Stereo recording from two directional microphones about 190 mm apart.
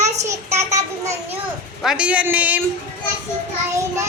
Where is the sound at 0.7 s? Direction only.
15° right (ahead or behind).